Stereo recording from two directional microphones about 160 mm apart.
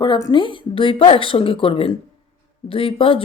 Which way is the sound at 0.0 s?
25° left (ahead or behind).